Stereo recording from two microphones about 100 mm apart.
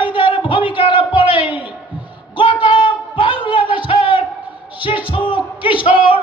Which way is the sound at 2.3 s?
55° left (ahead or behind).